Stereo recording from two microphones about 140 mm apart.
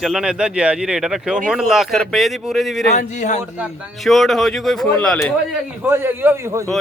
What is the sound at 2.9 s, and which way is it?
Speech, 60° left (ahead or behind).